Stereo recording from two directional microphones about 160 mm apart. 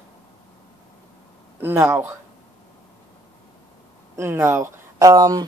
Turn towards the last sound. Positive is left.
turn(degrees=-25)  # may be behind; listen again after turning